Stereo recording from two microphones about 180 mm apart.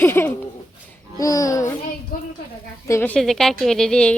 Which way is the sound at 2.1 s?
55° left (ahead or behind).